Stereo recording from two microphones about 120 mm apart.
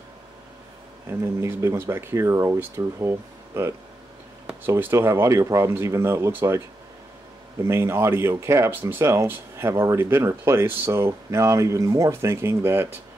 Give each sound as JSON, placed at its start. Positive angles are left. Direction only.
{"t": 1.2, "sound": "speech", "side_deg": -20}
{"t": 7.6, "sound": "speech", "side_deg": -20}